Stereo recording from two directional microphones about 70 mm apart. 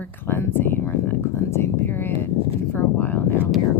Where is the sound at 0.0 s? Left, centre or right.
Left.